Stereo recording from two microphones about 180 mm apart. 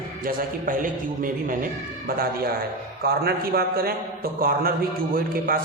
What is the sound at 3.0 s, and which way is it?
A man's voice, 60° right (ahead or behind).